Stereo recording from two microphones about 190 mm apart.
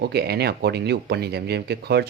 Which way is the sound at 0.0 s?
60° right (ahead or behind).